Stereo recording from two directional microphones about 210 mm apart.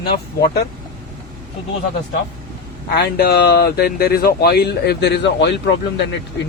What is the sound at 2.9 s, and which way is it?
Speech, 50° left (ahead or behind).